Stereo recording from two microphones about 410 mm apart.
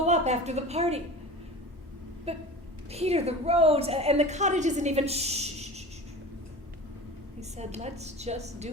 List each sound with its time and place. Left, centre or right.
0.0 s a woman's voice: centre
2.3 s a woman's voice: centre
7.3 s a woman's voice: centre